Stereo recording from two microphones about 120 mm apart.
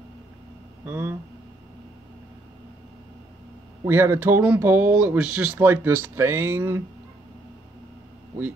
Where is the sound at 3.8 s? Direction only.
20° right (ahead or behind).